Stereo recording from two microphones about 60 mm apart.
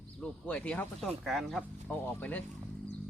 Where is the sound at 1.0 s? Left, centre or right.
Centre.